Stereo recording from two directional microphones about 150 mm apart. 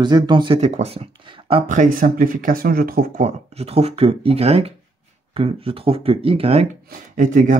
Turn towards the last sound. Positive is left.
turn(degrees=-65)  # may be behind; listen again after turning